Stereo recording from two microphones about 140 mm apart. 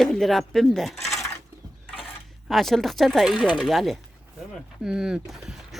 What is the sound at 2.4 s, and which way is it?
Speech, centre (ahead or behind).